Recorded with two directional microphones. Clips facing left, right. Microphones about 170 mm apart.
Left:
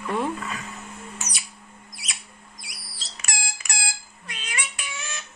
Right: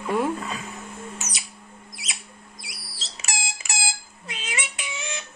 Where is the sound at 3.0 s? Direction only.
25° right (ahead or behind).